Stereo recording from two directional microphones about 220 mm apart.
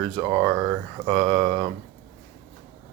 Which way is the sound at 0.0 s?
25° right (ahead or behind).